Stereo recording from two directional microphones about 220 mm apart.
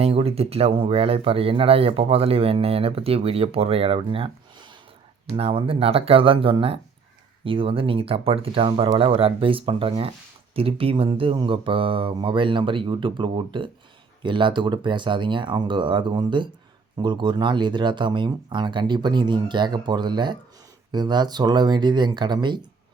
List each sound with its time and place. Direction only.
0.0 s speech: 25° right (ahead or behind)
5.4 s speech: 25° right (ahead or behind)